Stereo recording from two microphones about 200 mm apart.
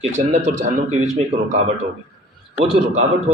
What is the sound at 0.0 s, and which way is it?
A man's voice, 35° right (ahead or behind).